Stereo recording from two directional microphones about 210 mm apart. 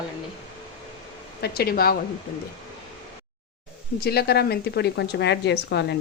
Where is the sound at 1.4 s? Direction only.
50° left (ahead or behind).